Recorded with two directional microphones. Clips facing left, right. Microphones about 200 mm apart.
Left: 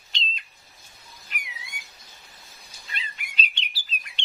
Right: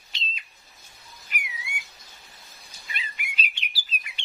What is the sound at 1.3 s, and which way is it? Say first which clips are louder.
Bird: right 4 dB; 5° right (ahead or behind).